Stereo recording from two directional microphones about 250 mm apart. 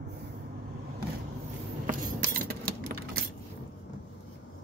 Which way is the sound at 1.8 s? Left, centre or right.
Right.